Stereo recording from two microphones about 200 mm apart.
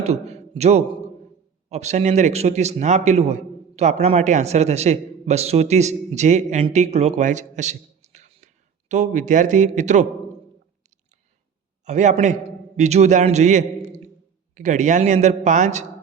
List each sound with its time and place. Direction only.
0.0 s a man's voice: 35° right (ahead or behind)
11.9 s a man's voice: 35° right (ahead or behind)